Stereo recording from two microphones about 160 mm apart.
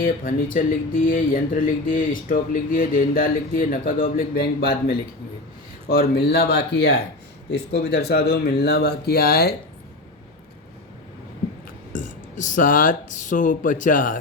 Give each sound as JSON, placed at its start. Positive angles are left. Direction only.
{"t": 0.0, "sound": "speech", "side_deg": 60}
{"t": 11.9, "sound": "speech", "side_deg": 55}